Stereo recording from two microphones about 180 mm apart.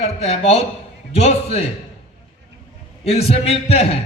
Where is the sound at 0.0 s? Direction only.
35° left (ahead or behind).